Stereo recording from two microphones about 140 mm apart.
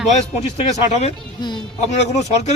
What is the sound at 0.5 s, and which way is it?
Speech, 50° left (ahead or behind).